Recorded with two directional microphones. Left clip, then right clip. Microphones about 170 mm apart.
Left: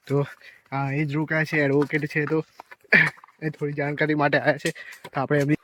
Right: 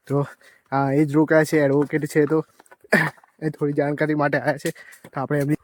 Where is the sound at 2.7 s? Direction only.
35° right (ahead or behind).